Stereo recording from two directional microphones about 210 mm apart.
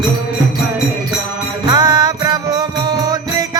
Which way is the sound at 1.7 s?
20° right (ahead or behind).